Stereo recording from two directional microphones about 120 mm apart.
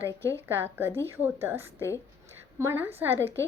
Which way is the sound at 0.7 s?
20° right (ahead or behind).